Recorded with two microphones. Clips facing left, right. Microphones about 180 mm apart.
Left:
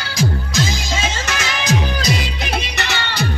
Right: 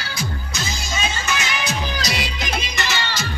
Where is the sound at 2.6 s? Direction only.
65° left (ahead or behind).